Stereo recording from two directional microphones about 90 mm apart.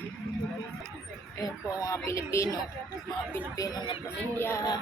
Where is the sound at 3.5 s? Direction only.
40° left (ahead or behind).